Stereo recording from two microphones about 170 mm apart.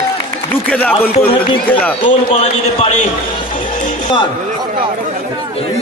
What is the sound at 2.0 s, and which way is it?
Speech, 35° left (ahead or behind).